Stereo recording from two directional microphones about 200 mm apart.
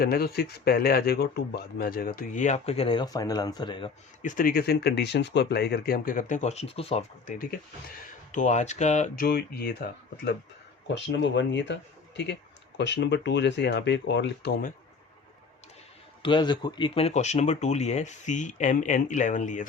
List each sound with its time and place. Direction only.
0.0 s speech: 50° left (ahead or behind); by 3.9 s 25° left (ahead or behind)
4.2 s speech: 40° left (ahead or behind)
10.9 s speech: 65° left (ahead or behind)
16.2 s speech: 25° left (ahead or behind); by 19.6 s 40° left (ahead or behind)